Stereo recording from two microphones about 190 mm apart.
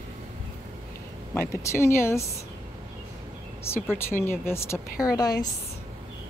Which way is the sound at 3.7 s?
15° left (ahead or behind).